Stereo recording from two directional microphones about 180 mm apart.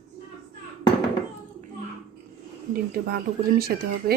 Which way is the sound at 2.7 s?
55° right (ahead or behind).